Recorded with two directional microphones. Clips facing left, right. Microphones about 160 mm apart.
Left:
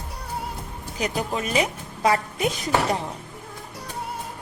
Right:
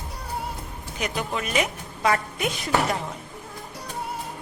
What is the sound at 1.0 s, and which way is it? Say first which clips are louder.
A woman's voice: left 2 dB; 35° left (ahead or behind).